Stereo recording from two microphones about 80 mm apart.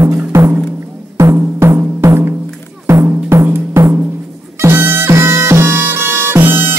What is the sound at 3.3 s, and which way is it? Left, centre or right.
Music, right.